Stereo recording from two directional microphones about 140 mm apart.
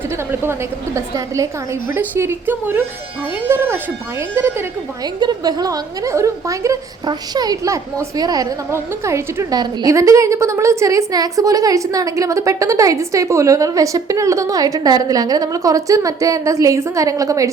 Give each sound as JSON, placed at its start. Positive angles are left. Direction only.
{"t": 0.9, "sound": "a woman's voice", "side_deg": -25}
{"t": 5.0, "sound": "a woman's voice", "side_deg": -30}